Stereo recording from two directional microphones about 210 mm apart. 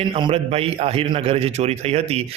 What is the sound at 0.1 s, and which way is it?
A man's voice, 25° right (ahead or behind).